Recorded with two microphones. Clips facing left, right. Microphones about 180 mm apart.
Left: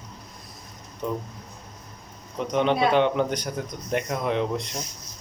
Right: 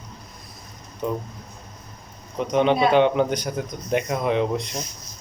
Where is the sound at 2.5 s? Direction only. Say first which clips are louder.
Right 3 dB; 20° right (ahead or behind).